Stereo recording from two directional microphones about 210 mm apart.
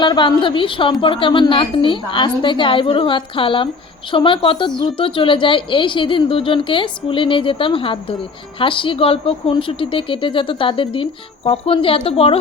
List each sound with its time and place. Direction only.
0.0 s speech: 20° left (ahead or behind)